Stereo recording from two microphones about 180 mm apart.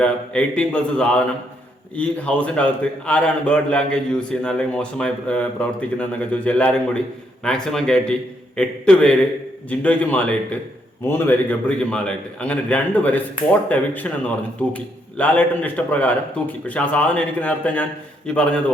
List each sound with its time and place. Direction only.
0.0 s a man's voice: 5° left (ahead or behind)